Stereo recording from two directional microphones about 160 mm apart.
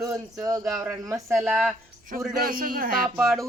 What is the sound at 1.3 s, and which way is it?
Speech, centre (ahead or behind).